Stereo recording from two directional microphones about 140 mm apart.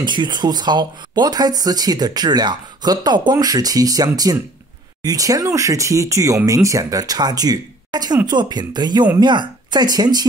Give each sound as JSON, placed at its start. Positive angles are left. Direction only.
{"t": 0.0, "sound": "speech", "side_deg": -30}